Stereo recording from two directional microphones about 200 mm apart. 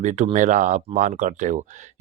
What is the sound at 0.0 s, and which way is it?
Speech, 40° right (ahead or behind).